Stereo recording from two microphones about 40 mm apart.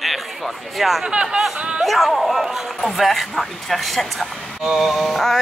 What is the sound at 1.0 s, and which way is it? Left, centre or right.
Speech, right.